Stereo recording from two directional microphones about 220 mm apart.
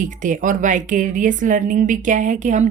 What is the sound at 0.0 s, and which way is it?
A woman's voice, 35° right (ahead or behind).